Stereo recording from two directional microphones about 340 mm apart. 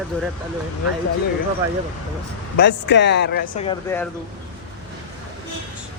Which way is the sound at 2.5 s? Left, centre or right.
Left.